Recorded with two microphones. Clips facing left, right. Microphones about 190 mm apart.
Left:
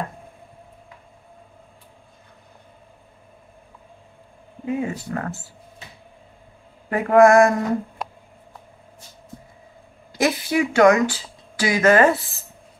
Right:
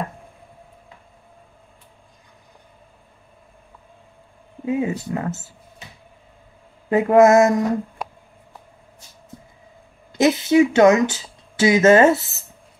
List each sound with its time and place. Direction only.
4.6 s speech: 20° right (ahead or behind)
6.9 s speech: 20° right (ahead or behind)
10.1 s speech: 20° right (ahead or behind)